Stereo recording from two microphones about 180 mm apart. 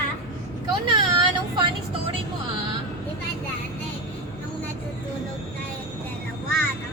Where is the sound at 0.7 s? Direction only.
25° right (ahead or behind).